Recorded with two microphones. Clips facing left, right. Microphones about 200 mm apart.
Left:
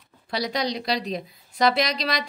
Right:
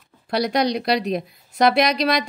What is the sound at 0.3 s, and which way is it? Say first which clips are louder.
A woman's voice: right 6 dB; 60° right (ahead or behind).